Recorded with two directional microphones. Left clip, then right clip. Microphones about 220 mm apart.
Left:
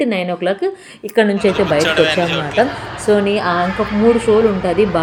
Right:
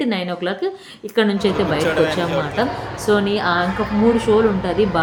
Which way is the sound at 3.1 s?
5° left (ahead or behind).